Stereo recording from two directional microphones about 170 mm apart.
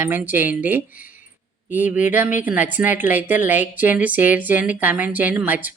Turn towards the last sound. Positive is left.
turn(degrees=-10)  # may be behind; listen again after turning